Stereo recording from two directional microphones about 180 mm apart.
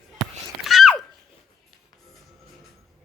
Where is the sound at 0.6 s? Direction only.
Centre (ahead or behind).